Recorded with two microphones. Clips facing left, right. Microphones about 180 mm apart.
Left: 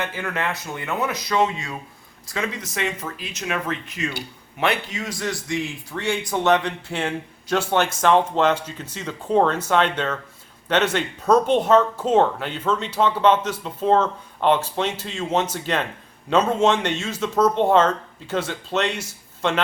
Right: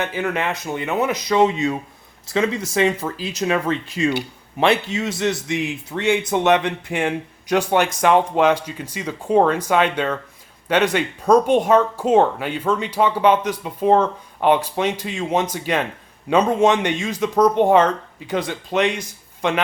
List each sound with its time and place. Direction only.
0.0 s speech: 20° right (ahead or behind)